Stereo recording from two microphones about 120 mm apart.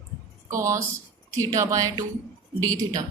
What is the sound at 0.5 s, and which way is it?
A woman's voice, 25° right (ahead or behind).